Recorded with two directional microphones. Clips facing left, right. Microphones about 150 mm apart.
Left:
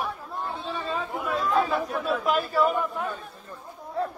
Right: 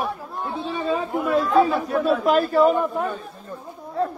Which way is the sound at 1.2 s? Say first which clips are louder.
Right 7 dB; centre (ahead or behind).